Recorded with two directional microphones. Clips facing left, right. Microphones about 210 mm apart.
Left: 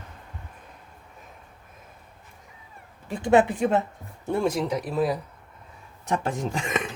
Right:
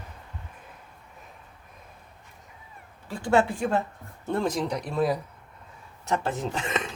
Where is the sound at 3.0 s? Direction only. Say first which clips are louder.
Left 3 dB; 20° left (ahead or behind).